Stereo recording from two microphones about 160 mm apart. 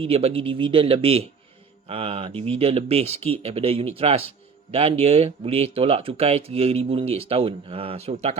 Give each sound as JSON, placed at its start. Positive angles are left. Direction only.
{"t": 0.0, "sound": "speech", "side_deg": -40}